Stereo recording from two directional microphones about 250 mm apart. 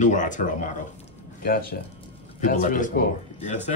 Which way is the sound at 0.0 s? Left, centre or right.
Left.